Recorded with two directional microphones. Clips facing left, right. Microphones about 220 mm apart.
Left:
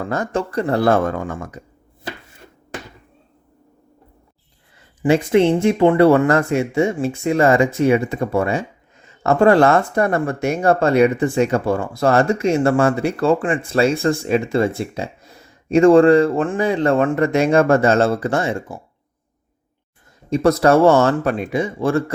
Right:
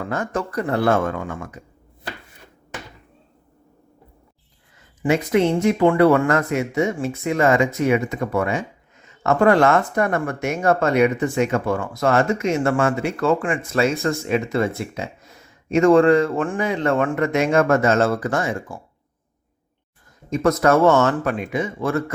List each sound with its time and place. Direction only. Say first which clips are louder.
0.1 s speech: left 3 dB; 30° left (ahead or behind)
5.0 s speech: left 4 dB; 30° left (ahead or behind)
20.3 s speech: left 3 dB; 30° left (ahead or behind)